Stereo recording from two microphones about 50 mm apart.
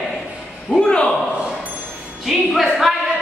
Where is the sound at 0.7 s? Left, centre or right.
Centre.